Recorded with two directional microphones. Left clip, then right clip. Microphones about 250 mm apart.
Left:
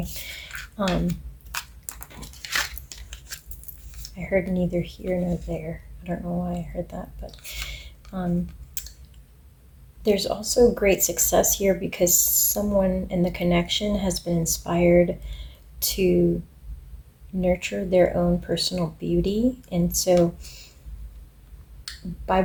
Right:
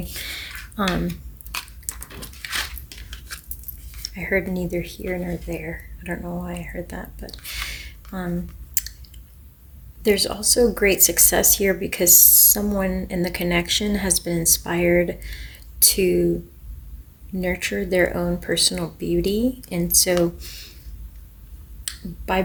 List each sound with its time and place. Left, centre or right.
0.1 s a sound: right
1.9 s a sound: centre
2.4 s biting: centre
4.1 s speech: right
10.0 s speech: right
17.4 s speech: right